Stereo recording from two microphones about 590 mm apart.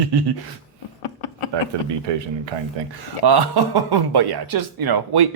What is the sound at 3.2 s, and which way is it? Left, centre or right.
Speech, right.